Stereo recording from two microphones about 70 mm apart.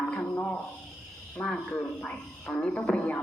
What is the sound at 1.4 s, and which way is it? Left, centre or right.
A man's voice, centre.